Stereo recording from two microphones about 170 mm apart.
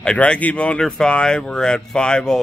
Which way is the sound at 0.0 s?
5° left (ahead or behind).